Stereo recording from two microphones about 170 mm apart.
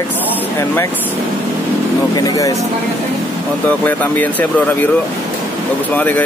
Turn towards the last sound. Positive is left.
turn(degrees=10)  # may be behind; listen again after turning